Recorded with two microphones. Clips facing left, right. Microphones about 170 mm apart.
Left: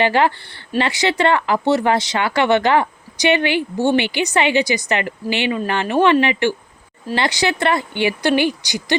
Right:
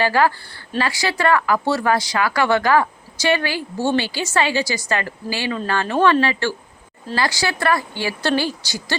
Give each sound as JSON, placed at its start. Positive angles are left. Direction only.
{"t": 0.0, "sound": "speech", "side_deg": 25}